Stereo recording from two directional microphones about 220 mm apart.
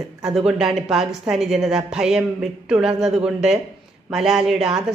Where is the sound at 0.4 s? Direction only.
5° right (ahead or behind).